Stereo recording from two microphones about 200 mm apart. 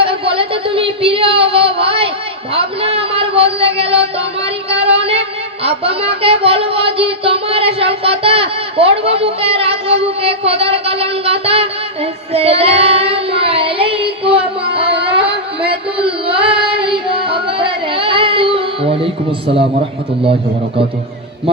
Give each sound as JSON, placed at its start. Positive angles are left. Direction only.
{"t": 0.0, "sound": "a sound", "side_deg": -25}
{"t": 4.8, "sound": "music", "side_deg": -30}
{"t": 5.6, "sound": "speech", "side_deg": -30}
{"t": 12.3, "sound": "child singing", "side_deg": -30}
{"t": 17.2, "sound": "music", "side_deg": -25}